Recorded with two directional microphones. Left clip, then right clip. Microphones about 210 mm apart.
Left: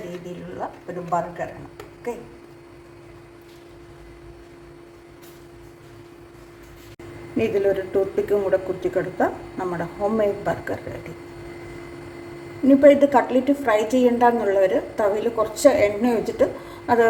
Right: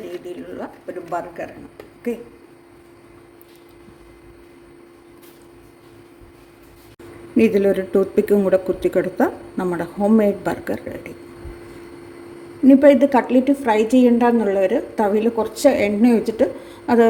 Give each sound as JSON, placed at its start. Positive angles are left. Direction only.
{"t": 7.3, "sound": "speech", "side_deg": -35}
{"t": 12.6, "sound": "a woman's voice", "side_deg": -30}